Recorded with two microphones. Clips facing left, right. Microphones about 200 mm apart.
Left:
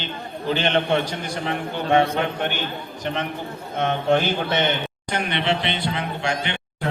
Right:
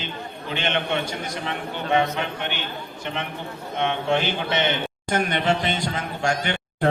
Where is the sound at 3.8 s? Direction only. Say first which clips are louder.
Left 3 dB; 40° left (ahead or behind).